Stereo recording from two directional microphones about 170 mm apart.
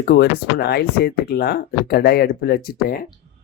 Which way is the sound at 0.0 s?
75° left (ahead or behind).